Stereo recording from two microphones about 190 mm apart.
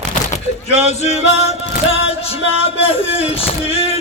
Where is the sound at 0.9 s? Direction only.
35° left (ahead or behind).